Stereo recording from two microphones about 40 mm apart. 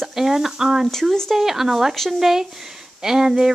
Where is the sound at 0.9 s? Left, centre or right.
Centre.